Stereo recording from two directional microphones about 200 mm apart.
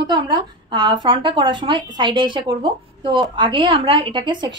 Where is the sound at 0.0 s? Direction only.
20° right (ahead or behind).